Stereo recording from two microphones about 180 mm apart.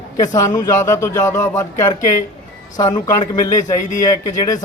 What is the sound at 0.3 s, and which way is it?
Speech, 20° left (ahead or behind).